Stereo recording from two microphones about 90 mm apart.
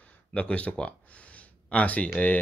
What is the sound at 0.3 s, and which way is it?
Speech, 10° left (ahead or behind).